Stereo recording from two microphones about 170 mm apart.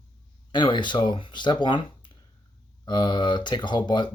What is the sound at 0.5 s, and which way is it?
Speech, 25° left (ahead or behind).